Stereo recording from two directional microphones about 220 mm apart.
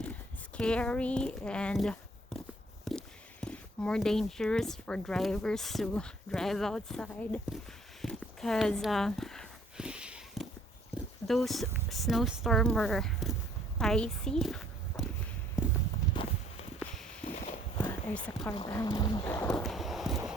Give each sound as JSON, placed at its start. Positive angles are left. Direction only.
{"t": 0.0, "sound": "speech", "side_deg": 5}
{"t": 2.9, "sound": "walk", "side_deg": 0}
{"t": 3.4, "sound": "speech", "side_deg": 5}
{"t": 8.0, "sound": "a sound", "side_deg": 0}
{"t": 11.3, "sound": "speech", "side_deg": 0}
{"t": 15.6, "sound": "clip-clop", "side_deg": -5}
{"t": 16.1, "sound": "walk", "side_deg": 20}
{"t": 16.8, "sound": "walk", "side_deg": 5}
{"t": 17.8, "sound": "clip-clop", "side_deg": 5}
{"t": 18.5, "sound": "speech", "side_deg": 20}
{"t": 19.5, "sound": "clip-clop", "side_deg": 0}